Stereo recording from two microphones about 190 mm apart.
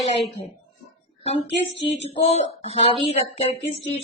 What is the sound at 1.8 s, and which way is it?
Speech, 35° left (ahead or behind).